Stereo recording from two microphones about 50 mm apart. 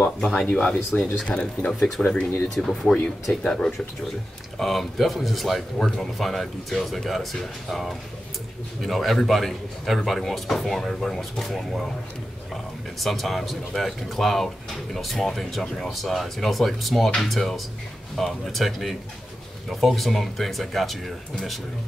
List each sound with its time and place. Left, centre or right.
0.0 s speech: centre
1.7 s a man's voice: centre
13.0 s a man's voice: centre